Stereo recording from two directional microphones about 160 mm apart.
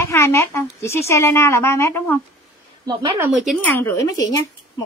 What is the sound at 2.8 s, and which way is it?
Speech, 25° right (ahead or behind).